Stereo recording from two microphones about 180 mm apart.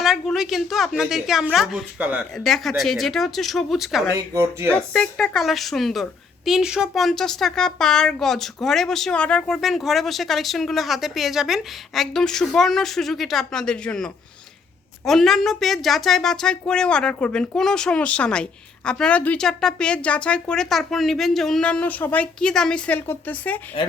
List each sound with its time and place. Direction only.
0.0 s a woman's voice: centre (ahead or behind)
23.8 s speech: 30° left (ahead or behind)